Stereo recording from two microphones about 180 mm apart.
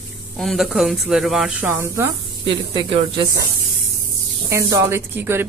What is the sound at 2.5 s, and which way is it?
Speech, 25° right (ahead or behind).